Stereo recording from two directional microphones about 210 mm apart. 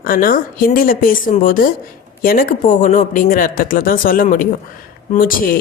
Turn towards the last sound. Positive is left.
turn(degrees=40)  # may be behind; listen again after turning